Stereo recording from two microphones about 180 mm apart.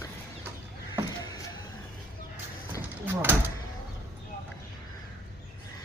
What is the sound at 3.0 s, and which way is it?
Door, 10° right (ahead or behind).